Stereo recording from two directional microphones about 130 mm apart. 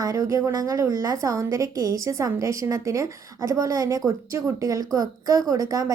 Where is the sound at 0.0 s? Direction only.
25° right (ahead or behind).